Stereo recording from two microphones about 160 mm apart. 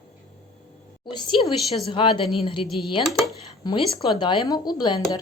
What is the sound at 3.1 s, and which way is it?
Speech, centre (ahead or behind).